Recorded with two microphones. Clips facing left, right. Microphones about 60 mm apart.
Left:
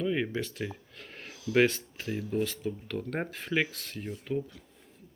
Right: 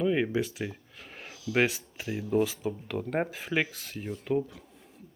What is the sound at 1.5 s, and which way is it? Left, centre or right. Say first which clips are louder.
Speech: left 2 dB; centre.